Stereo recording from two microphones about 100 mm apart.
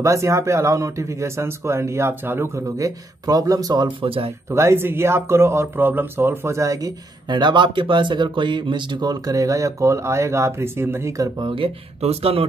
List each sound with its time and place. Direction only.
0.0 s speech: 30° right (ahead or behind)
4.0 s speech: 65° right (ahead or behind)
4.5 s speech: 25° right (ahead or behind)
7.2 s speech: 50° right (ahead or behind); by 11.2 s 25° right (ahead or behind)
11.3 s speech: 60° right (ahead or behind); by 12.4 s 75° right (ahead or behind)